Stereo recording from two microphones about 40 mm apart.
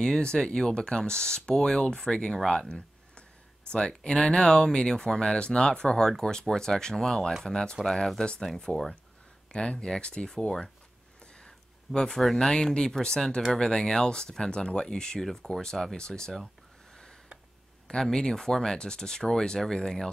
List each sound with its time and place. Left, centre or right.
0.0 s speech: centre
3.7 s speech: left
11.4 s a sound: centre
12.4 s speech: centre
17.8 s speech: centre